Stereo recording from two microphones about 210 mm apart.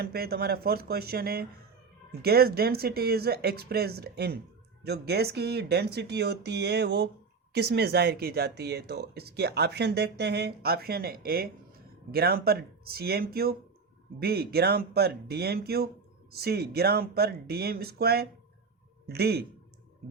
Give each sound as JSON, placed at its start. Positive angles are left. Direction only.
{"t": 0.0, "sound": "speech", "side_deg": -50}